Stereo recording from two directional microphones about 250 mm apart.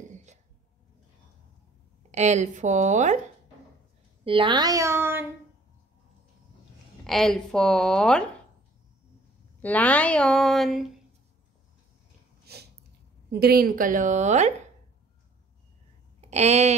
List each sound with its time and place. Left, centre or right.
2.0 s a woman's voice: right
4.2 s speech: right
7.1 s speech: centre
9.6 s speech: centre
12.5 s snort: right
13.3 s a woman's voice: right
16.2 s speech: right